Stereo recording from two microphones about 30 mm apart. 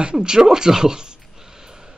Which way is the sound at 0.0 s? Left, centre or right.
Right.